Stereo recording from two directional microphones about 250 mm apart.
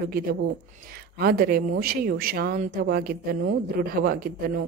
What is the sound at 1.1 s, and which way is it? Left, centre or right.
A woman's voice, right.